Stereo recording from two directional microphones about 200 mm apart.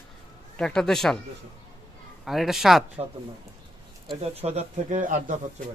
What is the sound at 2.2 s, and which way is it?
Speech, centre (ahead or behind).